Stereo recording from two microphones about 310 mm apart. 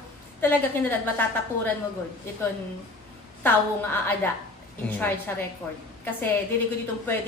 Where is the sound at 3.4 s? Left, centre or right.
Centre.